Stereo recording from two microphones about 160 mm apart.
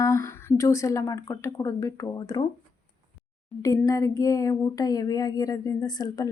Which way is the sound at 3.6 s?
20° left (ahead or behind).